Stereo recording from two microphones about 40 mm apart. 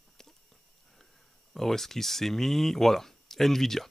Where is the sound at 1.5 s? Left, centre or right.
Centre.